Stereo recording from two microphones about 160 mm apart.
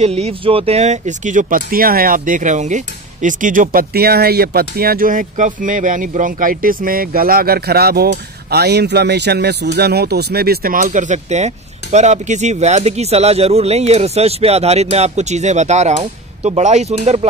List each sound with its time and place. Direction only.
0.0 s speech: 40° right (ahead or behind); by 8.1 s 75° right (ahead or behind)
8.5 s speech: 90° right; by 17.3 s 45° right (ahead or behind)